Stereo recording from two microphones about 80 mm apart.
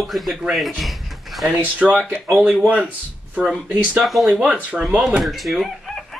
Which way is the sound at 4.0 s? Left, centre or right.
Centre.